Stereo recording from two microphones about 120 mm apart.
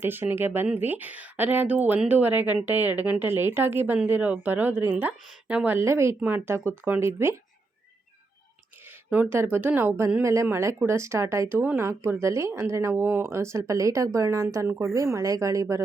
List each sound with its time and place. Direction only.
0.0 s speech: 15° right (ahead or behind)
9.0 s speech: 10° right (ahead or behind)
9.3 s speech: 20° right (ahead or behind)